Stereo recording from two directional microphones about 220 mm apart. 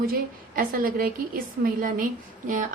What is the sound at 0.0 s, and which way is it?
A woman's voice, 40° right (ahead or behind).